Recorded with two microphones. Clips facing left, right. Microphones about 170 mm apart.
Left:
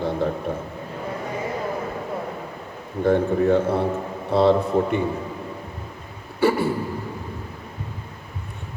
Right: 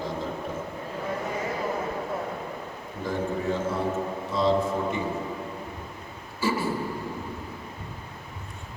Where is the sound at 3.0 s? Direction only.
65° left (ahead or behind).